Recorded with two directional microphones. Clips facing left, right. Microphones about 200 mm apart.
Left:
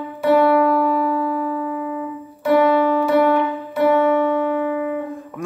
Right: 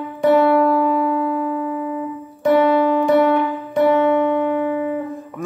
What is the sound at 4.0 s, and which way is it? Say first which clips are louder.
Music: right 1 dB; 20° right (ahead or behind).